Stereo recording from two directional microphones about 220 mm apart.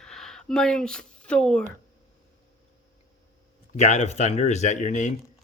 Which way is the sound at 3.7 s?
30° left (ahead or behind).